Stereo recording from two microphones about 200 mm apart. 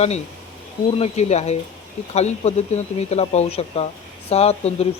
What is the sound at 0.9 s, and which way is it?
Speech, 35° left (ahead or behind).